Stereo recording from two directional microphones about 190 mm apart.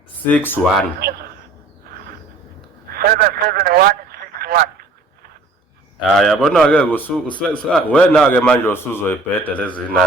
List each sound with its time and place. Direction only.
0.3 s a man's voice: 10° left (ahead or behind)
0.9 s a sound: 55° right (ahead or behind)
2.9 s telephone: 50° right (ahead or behind)
6.0 s a man's voice: centre (ahead or behind)